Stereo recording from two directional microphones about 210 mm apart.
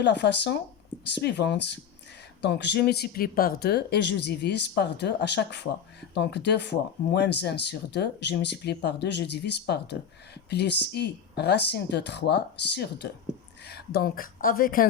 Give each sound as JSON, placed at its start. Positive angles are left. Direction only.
{"t": 0.0, "sound": "a woman's voice", "side_deg": 55}